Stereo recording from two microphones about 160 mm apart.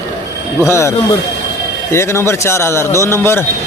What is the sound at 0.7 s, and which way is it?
Speech, 15° left (ahead or behind).